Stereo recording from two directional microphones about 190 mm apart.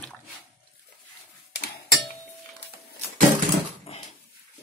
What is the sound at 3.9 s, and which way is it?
Dog, 30° left (ahead or behind).